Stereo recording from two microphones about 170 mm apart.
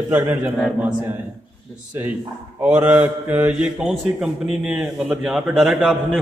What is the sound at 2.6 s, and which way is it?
A man's voice, 10° right (ahead or behind).